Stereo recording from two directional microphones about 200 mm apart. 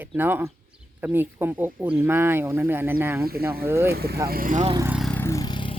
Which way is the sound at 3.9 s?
50° right (ahead or behind).